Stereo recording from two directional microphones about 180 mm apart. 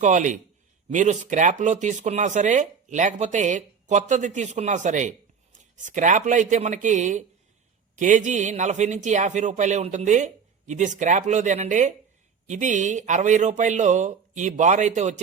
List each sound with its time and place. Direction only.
0.0 s speech: 45° right (ahead or behind)